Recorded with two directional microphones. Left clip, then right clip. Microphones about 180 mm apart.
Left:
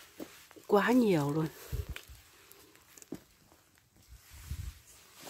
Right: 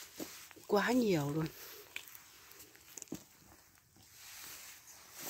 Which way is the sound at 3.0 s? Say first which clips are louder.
Right 6 dB; 40° right (ahead or behind).